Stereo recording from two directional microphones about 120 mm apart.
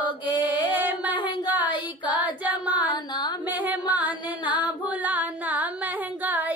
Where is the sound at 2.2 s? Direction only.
15° right (ahead or behind).